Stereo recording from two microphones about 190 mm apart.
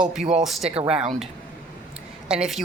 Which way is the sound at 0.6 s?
30° right (ahead or behind).